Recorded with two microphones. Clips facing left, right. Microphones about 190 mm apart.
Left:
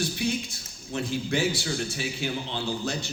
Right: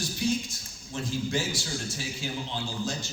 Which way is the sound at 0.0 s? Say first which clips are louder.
Left 1 dB; 65° left (ahead or behind).